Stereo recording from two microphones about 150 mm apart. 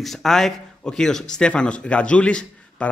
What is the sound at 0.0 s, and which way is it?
A man's voice, centre (ahead or behind).